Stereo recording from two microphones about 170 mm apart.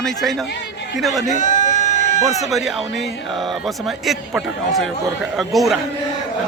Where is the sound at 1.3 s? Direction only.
45° left (ahead or behind).